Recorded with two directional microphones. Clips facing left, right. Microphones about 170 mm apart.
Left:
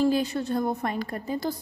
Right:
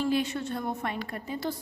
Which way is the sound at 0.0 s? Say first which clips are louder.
Left 4 dB; 35° left (ahead or behind).